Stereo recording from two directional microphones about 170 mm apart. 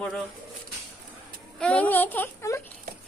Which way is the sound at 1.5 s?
5° left (ahead or behind).